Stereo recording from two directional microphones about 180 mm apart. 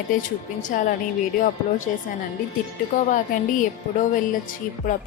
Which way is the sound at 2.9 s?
45° left (ahead or behind).